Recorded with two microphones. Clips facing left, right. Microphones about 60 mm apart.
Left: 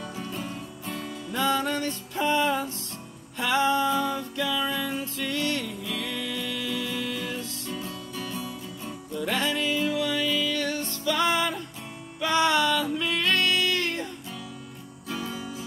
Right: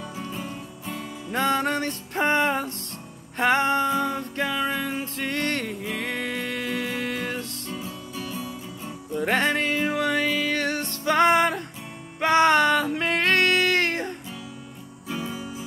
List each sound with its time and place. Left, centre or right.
0.1 s music: centre
1.3 s music: right
3.9 s music: right
7.7 s music: centre
9.2 s music: right
15.0 s music: centre